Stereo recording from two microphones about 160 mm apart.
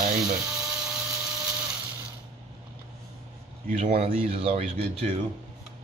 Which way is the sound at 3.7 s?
55° right (ahead or behind).